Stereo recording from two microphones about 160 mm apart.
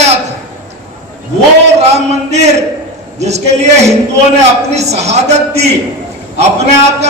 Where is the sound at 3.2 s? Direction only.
45° right (ahead or behind).